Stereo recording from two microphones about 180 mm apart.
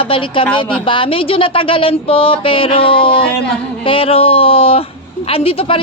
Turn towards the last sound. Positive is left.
turn(degrees=30)  # may be behind; listen again after turning